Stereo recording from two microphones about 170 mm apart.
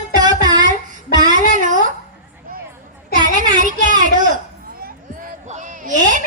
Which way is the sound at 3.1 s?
50° right (ahead or behind).